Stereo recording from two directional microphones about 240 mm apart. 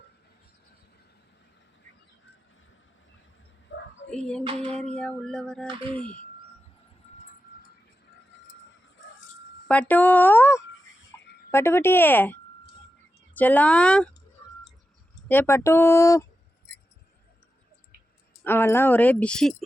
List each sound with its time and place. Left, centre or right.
3.7 s bow-wow: left
4.1 s speech: centre
9.6 s speech: centre
15.3 s speech: centre
18.4 s speech: centre